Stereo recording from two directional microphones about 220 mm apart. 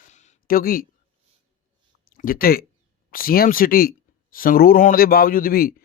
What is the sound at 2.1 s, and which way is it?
Speech, 40° left (ahead or behind).